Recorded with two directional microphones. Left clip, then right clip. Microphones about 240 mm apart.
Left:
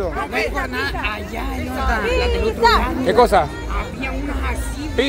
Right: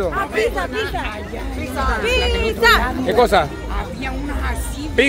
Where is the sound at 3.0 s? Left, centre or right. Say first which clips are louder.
Left 3 dB; centre.